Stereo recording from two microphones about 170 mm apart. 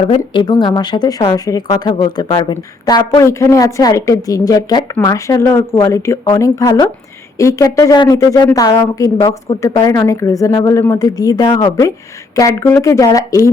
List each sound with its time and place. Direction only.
0.3 s a woman's voice: 25° left (ahead or behind)